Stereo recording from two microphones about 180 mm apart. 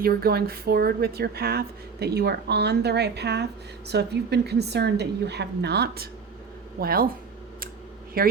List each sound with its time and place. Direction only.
0.0 s speech: 60° right (ahead or behind)
8.2 s speech: 55° right (ahead or behind)